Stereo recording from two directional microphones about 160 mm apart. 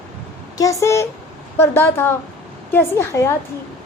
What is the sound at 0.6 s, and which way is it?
A woman's voice, 20° left (ahead or behind).